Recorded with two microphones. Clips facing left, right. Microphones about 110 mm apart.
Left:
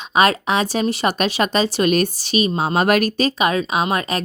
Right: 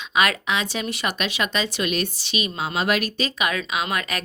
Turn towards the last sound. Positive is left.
turn(degrees=30)  # may be behind; listen again after turning